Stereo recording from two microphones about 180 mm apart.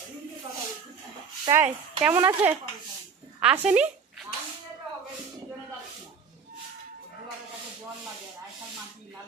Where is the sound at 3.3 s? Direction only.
5° right (ahead or behind).